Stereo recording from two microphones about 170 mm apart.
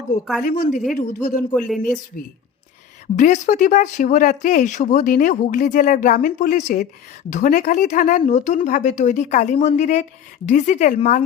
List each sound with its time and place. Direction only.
0.4 s speech: 50° left (ahead or behind)
1.5 s speech: 5° left (ahead or behind)
3.2 s speech: 45° left (ahead or behind)